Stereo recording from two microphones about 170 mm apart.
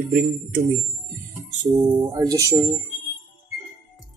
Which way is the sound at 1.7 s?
25° right (ahead or behind).